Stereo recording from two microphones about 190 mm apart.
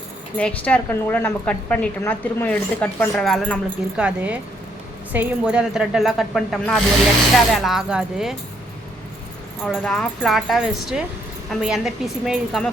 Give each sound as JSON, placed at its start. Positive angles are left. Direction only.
{"t": 0.3, "sound": "a woman's voice", "side_deg": 5}
{"t": 3.9, "sound": "speech", "side_deg": -5}
{"t": 9.6, "sound": "speech", "side_deg": 5}